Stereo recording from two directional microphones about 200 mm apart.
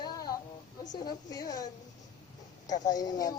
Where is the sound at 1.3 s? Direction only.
20° left (ahead or behind).